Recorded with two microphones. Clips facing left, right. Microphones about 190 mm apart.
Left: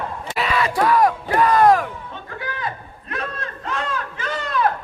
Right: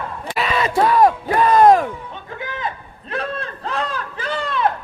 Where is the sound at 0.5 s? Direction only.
25° right (ahead or behind).